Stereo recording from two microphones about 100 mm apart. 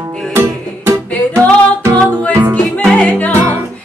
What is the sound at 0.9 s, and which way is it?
Music, 25° right (ahead or behind).